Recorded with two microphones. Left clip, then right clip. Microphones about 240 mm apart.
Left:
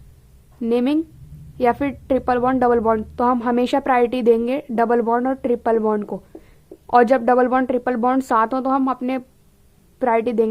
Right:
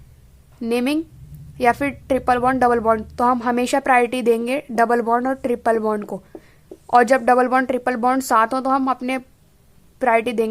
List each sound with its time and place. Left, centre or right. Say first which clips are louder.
0.6 s speech: left 2 dB; centre